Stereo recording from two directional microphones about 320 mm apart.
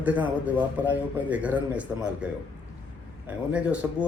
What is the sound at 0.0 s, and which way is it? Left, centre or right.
A man's voice, centre.